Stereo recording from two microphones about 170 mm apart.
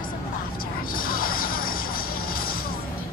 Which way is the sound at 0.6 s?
55° left (ahead or behind).